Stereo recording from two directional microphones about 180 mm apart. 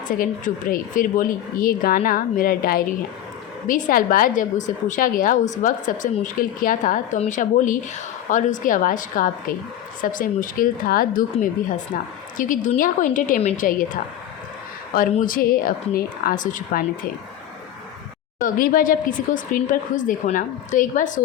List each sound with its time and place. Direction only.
0.1 s a woman's voice: 50° left (ahead or behind)
12.4 s a woman's voice: 45° left (ahead or behind)
15.2 s a woman's voice: 50° left (ahead or behind)
18.3 s a woman's voice: 50° left (ahead or behind)